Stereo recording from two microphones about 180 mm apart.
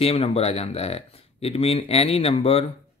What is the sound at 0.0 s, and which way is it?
Speech, 35° left (ahead or behind).